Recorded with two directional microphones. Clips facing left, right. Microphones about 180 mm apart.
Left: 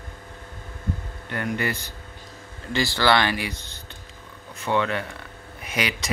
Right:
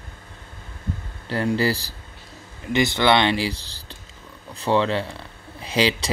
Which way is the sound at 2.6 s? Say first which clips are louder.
Right 3 dB; 20° right (ahead or behind).